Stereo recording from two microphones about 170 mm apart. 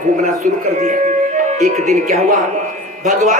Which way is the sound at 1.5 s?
45° right (ahead or behind).